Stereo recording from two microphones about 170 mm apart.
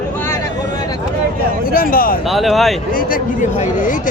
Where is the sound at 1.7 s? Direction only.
55° left (ahead or behind).